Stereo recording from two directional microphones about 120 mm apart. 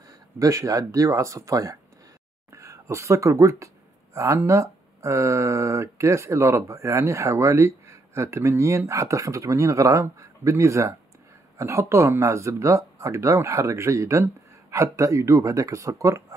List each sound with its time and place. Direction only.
0.4 s speech: 25° right (ahead or behind)